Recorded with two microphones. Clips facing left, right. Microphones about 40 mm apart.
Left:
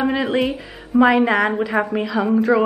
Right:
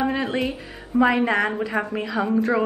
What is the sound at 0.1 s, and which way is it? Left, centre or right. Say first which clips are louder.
Speech: left 4 dB; left.